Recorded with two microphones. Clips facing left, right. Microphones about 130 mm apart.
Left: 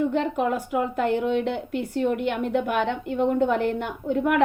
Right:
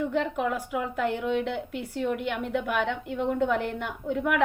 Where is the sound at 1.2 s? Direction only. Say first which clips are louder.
Left 3 dB; 30° left (ahead or behind).